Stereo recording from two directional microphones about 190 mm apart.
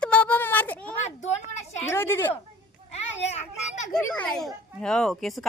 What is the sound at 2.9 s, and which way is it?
A child's voice, 35° left (ahead or behind).